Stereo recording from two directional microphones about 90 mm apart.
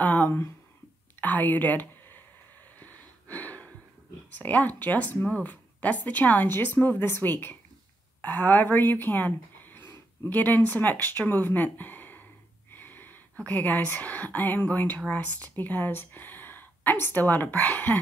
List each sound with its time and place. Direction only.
0.0 s speech: 20° left (ahead or behind)
2.8 s gasp: 20° left (ahead or behind)
4.3 s speech: 15° left (ahead or behind)
12.7 s a sound: 20° left (ahead or behind)
13.5 s speech: 15° left (ahead or behind)